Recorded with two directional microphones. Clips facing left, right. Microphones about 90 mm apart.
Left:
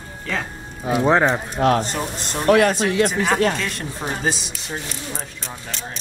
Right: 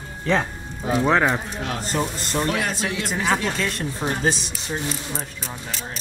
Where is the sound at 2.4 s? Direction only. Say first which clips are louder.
Left 11 dB; 60° left (ahead or behind).